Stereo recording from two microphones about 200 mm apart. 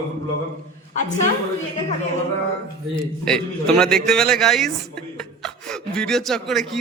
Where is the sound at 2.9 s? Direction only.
5° left (ahead or behind).